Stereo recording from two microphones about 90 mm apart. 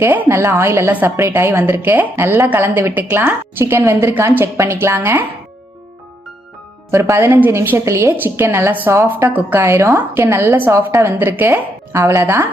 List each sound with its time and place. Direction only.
0.0 s a woman's voice: 25° right (ahead or behind)
6.9 s a woman's voice: 30° right (ahead or behind)